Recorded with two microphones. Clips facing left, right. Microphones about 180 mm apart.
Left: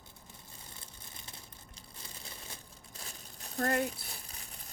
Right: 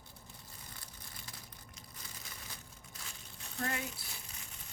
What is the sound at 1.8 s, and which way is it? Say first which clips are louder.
Crumpling: left 3 dB; 30° left (ahead or behind).